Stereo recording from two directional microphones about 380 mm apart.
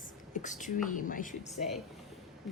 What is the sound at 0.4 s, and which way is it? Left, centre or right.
Speech, centre.